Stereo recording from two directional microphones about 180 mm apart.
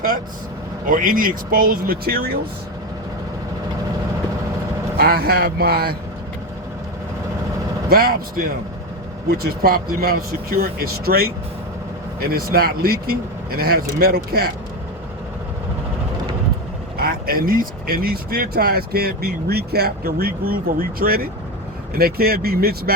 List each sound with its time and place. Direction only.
0.9 s speech: 50° right (ahead or behind)
4.9 s speech: 60° right (ahead or behind)
7.9 s speech: 55° right (ahead or behind)
17.0 s speech: 55° right (ahead or behind)